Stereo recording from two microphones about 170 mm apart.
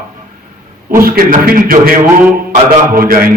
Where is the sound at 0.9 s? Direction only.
60° right (ahead or behind).